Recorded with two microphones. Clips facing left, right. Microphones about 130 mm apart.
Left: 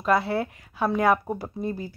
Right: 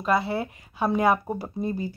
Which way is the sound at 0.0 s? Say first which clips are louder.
Left 1 dB; 5° right (ahead or behind).